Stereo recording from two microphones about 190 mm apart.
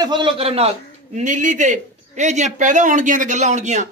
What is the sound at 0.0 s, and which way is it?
A man's voice, 25° right (ahead or behind).